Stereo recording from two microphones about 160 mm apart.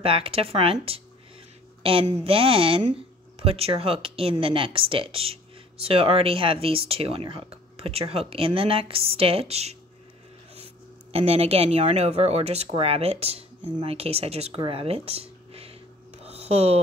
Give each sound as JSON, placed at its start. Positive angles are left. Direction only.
{"t": 0.0, "sound": "speech", "side_deg": -35}
{"t": 1.8, "sound": "speech", "side_deg": -35}
{"t": 11.1, "sound": "speech", "side_deg": -40}
{"t": 16.2, "sound": "a sound", "side_deg": -40}